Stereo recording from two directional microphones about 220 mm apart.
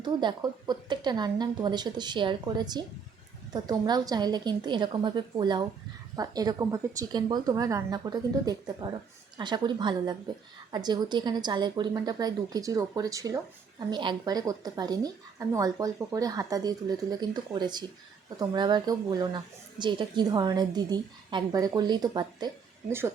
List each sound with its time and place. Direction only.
0.0 s a woman's voice: 20° right (ahead or behind)